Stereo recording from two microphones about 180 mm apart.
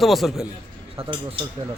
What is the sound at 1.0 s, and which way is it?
Speech, 30° right (ahead or behind).